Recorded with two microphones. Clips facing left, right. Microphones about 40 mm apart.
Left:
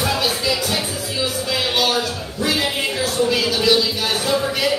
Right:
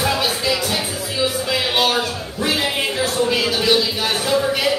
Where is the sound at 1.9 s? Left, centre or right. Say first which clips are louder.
Right 1 dB; centre.